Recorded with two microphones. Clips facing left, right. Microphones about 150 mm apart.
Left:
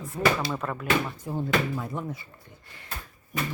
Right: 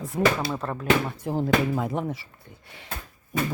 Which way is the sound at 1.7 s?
75° right (ahead or behind).